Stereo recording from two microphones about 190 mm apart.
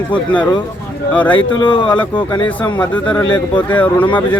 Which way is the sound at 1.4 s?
25° left (ahead or behind).